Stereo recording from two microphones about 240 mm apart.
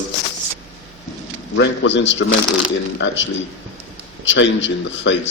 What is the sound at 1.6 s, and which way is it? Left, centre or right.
Speech, left.